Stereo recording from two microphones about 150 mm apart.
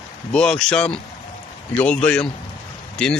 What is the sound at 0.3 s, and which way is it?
Speech, 5° left (ahead or behind).